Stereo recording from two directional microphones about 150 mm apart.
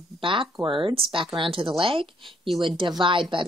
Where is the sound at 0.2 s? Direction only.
35° right (ahead or behind).